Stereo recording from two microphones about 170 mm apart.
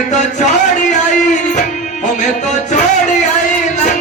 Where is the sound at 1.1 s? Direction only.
45° left (ahead or behind).